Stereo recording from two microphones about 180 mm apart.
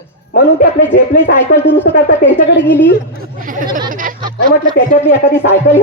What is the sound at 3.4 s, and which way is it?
Speech, 50° right (ahead or behind).